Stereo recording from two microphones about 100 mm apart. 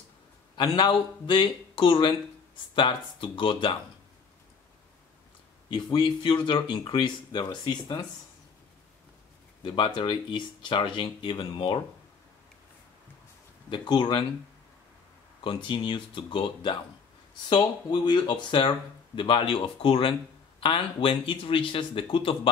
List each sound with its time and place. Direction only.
0.6 s speech: 55° left (ahead or behind)
5.7 s speech: 55° left (ahead or behind)
9.6 s speech: 60° left (ahead or behind)
13.7 s speech: 50° left (ahead or behind)
15.4 s speech: 55° left (ahead or behind)